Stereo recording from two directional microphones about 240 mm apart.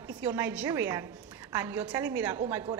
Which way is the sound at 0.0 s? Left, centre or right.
Centre.